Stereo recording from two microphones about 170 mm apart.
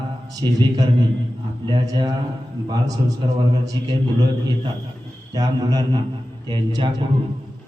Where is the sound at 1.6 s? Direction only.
25° right (ahead or behind).